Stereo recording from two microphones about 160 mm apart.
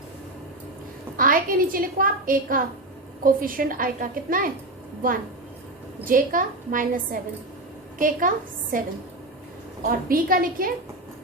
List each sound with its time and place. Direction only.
1.1 s a woman's voice: 60° right (ahead or behind)
6.1 s a woman's voice: 60° right (ahead or behind)